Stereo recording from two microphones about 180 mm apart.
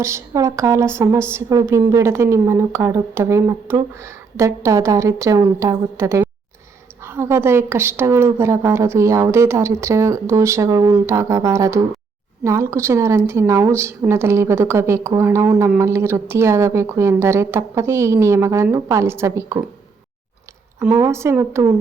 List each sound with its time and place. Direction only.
0.0 s a woman's voice: 15° right (ahead or behind)
20.7 s a woman's voice: 15° right (ahead or behind)